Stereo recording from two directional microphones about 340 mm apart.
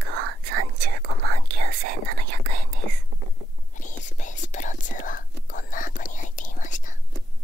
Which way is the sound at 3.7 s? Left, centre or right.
Left.